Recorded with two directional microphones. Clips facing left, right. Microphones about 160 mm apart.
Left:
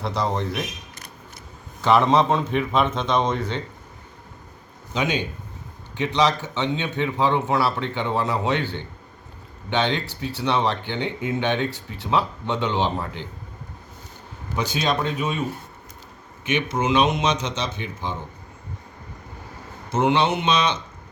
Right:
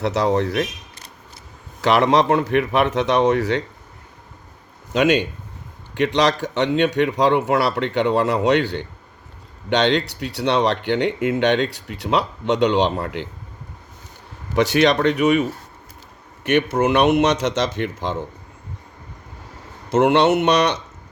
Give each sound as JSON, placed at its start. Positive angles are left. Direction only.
{"t": 0.0, "sound": "speech", "side_deg": -75}
{"t": 1.8, "sound": "speech", "side_deg": -70}
{"t": 4.9, "sound": "speech", "side_deg": -85}
{"t": 5.9, "sound": "speech", "side_deg": -70}
{"t": 14.5, "sound": "speech", "side_deg": -75}
{"t": 16.4, "sound": "speech", "side_deg": -65}
{"t": 19.9, "sound": "speech", "side_deg": -75}